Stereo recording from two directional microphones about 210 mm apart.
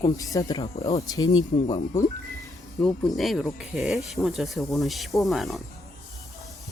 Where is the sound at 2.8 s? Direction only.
Centre (ahead or behind).